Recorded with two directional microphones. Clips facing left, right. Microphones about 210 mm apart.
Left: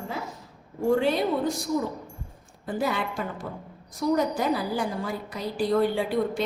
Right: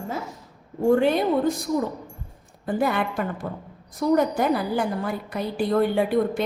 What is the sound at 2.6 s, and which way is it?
A woman's voice, 60° right (ahead or behind).